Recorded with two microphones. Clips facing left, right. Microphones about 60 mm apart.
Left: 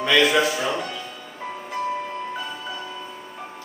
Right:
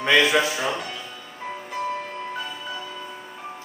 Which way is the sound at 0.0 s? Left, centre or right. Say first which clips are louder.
Even; right.